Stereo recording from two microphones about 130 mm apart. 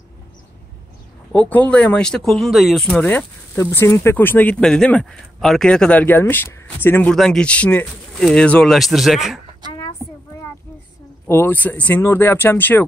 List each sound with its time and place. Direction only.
1.3 s speech: 15° left (ahead or behind)
9.7 s a sound: 40° left (ahead or behind)
11.2 s speech: 15° left (ahead or behind)